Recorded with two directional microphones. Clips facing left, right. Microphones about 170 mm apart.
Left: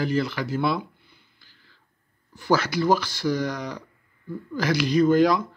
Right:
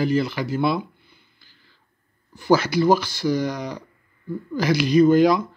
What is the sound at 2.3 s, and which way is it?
Speech, 15° right (ahead or behind).